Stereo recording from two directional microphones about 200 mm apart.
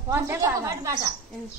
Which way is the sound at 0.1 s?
15° right (ahead or behind).